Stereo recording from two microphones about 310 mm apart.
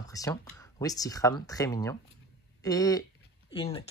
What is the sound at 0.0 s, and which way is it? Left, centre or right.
Speech, centre.